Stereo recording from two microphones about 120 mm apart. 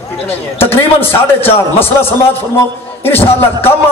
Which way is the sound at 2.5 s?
20° left (ahead or behind).